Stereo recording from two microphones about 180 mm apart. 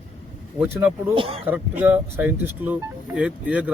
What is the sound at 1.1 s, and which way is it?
Speech, 30° right (ahead or behind).